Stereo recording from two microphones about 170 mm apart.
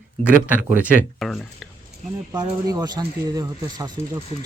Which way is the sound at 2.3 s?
20° right (ahead or behind).